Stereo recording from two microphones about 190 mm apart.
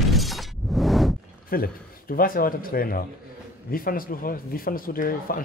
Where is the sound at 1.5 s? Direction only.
50° left (ahead or behind).